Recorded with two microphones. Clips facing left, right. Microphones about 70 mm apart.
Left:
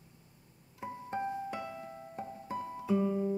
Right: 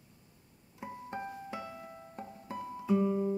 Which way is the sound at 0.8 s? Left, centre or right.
Centre.